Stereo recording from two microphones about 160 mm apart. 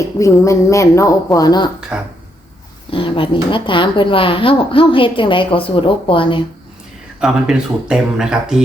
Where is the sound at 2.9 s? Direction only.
35° left (ahead or behind).